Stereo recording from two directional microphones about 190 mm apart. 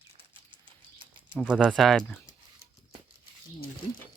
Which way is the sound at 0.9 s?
25° right (ahead or behind).